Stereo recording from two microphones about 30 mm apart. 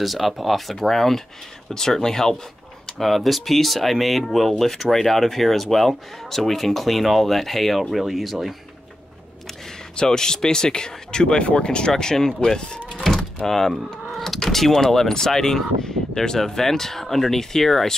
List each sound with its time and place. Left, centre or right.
0.0 s speech: centre
3.0 s speech: centre
9.9 s speech: left
12.9 s a sound: centre
13.5 s speech: centre